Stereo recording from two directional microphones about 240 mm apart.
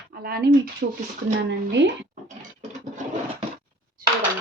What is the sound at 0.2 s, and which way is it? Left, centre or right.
Speech, right.